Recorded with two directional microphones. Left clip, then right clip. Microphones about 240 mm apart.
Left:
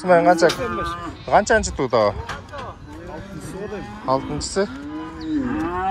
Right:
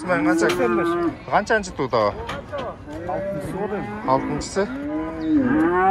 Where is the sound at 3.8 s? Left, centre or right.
Centre.